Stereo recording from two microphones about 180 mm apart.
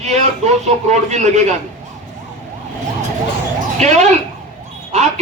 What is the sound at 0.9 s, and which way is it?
Speech, 40° right (ahead or behind).